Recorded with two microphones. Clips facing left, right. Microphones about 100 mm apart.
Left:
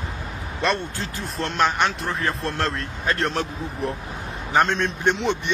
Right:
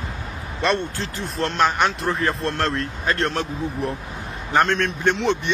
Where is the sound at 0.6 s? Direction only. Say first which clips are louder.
Right 2 dB; centre (ahead or behind).